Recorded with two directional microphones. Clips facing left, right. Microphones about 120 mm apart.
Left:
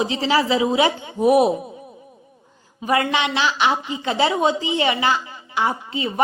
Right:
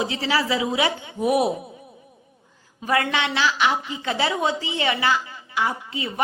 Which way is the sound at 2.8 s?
20° left (ahead or behind).